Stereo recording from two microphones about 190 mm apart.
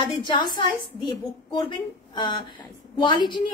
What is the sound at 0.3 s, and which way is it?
A woman's voice, 25° left (ahead or behind).